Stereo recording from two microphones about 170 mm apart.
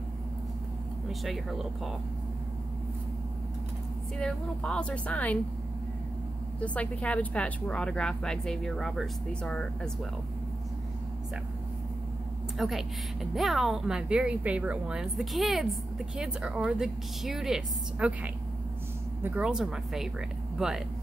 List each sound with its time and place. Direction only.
1.0 s speech: centre (ahead or behind)
4.2 s speech: 5° left (ahead or behind)
6.6 s speech: 10° left (ahead or behind)
12.5 s speech: centre (ahead or behind)